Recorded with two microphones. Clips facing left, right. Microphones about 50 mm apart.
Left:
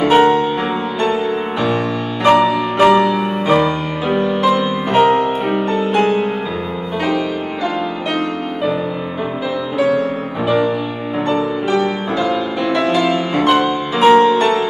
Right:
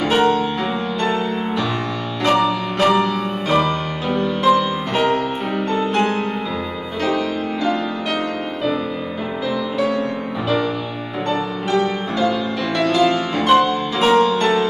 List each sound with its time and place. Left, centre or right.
0.0 s music: centre
2.2 s music: centre
5.7 s music: centre
11.2 s music: left